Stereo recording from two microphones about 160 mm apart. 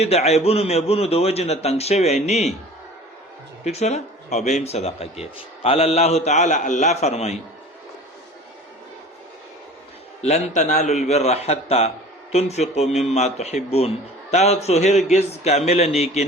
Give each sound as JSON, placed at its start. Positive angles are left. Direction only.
{"t": 0.0, "sound": "a man's voice", "side_deg": 40}
{"t": 3.6, "sound": "speech", "side_deg": 45}
{"t": 10.2, "sound": "speech", "side_deg": 45}